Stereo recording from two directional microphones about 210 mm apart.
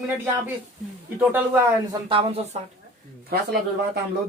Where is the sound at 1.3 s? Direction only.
10° right (ahead or behind).